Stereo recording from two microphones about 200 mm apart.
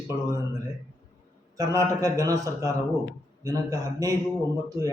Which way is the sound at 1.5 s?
15° right (ahead or behind).